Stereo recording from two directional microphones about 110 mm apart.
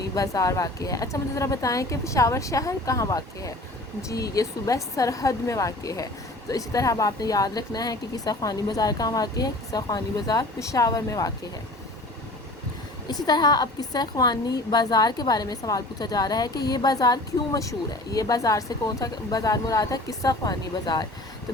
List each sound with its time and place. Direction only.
0.1 s a woman's voice: 30° left (ahead or behind)
13.1 s a woman's voice: 40° left (ahead or behind)